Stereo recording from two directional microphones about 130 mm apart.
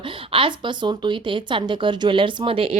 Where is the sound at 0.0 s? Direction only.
45° right (ahead or behind).